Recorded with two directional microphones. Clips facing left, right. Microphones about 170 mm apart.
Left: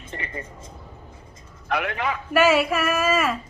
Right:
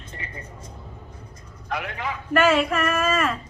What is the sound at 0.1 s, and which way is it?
Speech, 90° left.